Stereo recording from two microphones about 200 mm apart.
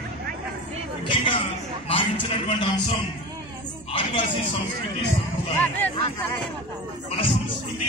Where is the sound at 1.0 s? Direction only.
25° left (ahead or behind).